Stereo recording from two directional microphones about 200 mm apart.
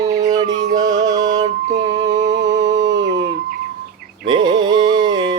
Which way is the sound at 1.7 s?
35° right (ahead or behind).